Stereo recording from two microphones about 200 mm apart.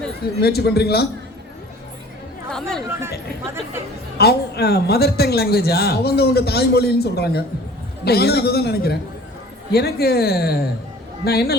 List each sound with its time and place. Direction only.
0.3 s speech: 50° left (ahead or behind)
2.5 s speech: 5° left (ahead or behind)
3.0 s speech: 15° right (ahead or behind)
4.2 s speech: 50° left (ahead or behind)